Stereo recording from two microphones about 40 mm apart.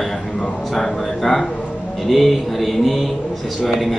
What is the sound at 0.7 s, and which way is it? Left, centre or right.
A man's voice, centre.